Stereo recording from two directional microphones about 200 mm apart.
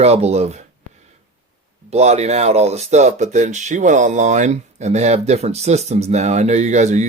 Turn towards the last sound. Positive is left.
turn(degrees=-35)  # may be behind; listen again after turning